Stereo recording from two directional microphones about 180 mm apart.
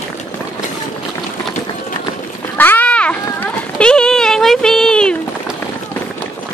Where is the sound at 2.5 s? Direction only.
10° left (ahead or behind).